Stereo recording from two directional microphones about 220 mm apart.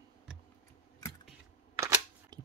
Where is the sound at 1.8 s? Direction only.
20° right (ahead or behind).